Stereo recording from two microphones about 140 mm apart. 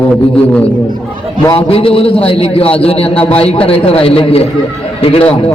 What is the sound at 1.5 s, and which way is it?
A man's voice, 45° left (ahead or behind).